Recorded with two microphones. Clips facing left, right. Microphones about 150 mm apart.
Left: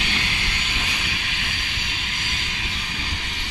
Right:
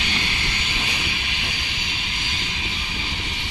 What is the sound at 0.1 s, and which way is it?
Vehicle, centre (ahead or behind).